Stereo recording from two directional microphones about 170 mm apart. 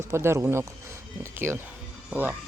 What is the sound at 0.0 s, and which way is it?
Speech, 15° right (ahead or behind).